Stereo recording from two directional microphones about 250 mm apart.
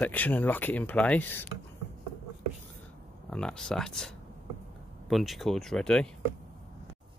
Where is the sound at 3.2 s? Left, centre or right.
Centre.